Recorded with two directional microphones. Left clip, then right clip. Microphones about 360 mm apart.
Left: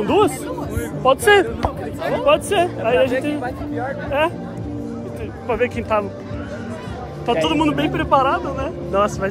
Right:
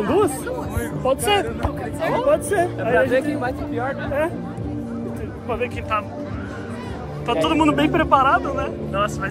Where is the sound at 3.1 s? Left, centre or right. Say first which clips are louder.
Right 1 dB; centre.